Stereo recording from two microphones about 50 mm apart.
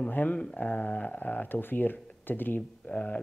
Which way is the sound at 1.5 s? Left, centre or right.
Left.